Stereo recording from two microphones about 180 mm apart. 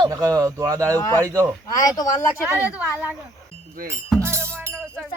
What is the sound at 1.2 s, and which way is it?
Speech, 20° right (ahead or behind).